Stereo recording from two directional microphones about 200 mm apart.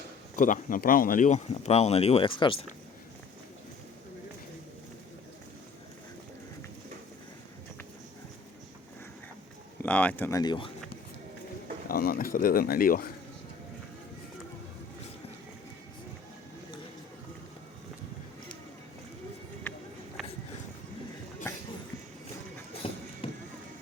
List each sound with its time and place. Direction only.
0.3 s speech: 40° left (ahead or behind); by 2.6 s 25° left (ahead or behind)
9.8 s speech: 5° left (ahead or behind)
11.9 s speech: 45° left (ahead or behind)
20.2 s music: centre (ahead or behind)
22.7 s horse: 30° left (ahead or behind)